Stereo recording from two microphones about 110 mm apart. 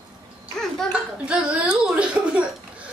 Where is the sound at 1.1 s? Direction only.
10° right (ahead or behind).